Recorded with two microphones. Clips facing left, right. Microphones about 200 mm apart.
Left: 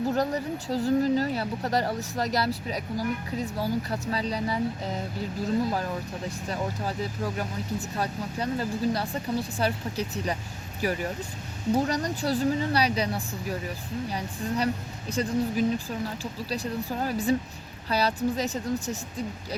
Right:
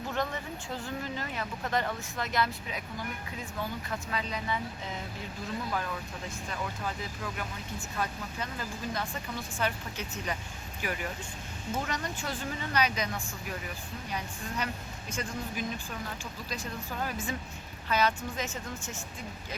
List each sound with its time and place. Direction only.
0.1 s speech: 40° left (ahead or behind)